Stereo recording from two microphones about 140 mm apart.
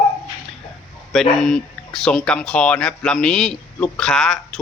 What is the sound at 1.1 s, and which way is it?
Speech, centre (ahead or behind).